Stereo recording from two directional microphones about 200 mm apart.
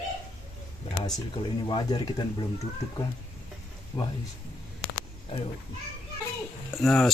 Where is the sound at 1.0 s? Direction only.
25° left (ahead or behind).